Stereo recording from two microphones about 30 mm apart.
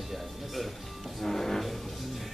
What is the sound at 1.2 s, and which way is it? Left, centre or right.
Speech, centre.